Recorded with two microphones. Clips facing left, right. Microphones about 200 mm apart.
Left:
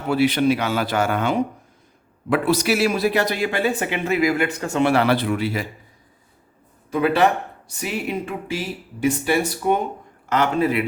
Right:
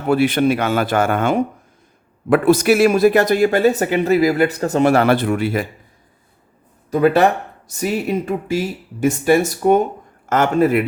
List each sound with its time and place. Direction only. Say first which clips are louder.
0.1 s speech: right 3 dB; 50° right (ahead or behind)
6.9 s speech: right 4 dB; 45° right (ahead or behind)